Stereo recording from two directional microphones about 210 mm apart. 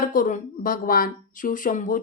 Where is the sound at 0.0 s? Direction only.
40° left (ahead or behind).